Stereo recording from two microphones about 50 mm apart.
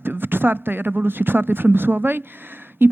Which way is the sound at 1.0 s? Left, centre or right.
Right.